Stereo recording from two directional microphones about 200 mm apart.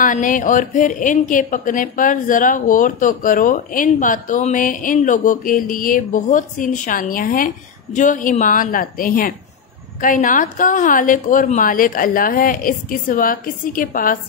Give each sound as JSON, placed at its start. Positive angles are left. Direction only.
{"t": 0.0, "sound": "a woman's voice", "side_deg": 40}